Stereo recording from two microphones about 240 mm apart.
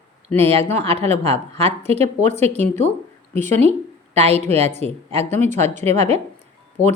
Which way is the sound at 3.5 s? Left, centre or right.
Right.